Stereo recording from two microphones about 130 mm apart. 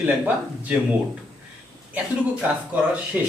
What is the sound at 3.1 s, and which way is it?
Speech, 10° right (ahead or behind).